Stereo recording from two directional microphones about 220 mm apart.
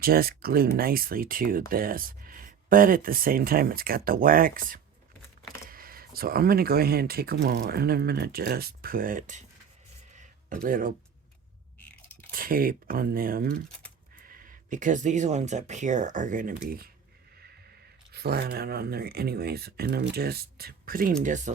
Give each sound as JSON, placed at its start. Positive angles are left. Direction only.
{"t": 0.0, "sound": "speech", "side_deg": -45}
{"t": 10.5, "sound": "speech", "side_deg": -40}
{"t": 12.3, "sound": "speech", "side_deg": -40}
{"t": 18.1, "sound": "speech", "side_deg": -45}